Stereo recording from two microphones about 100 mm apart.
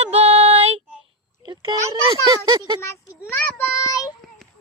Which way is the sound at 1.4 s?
50° right (ahead or behind).